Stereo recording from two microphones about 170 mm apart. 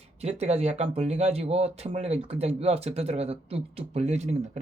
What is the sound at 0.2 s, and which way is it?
Speech, 40° right (ahead or behind).